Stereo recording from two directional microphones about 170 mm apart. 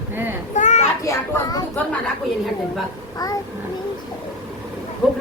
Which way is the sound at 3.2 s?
20° left (ahead or behind).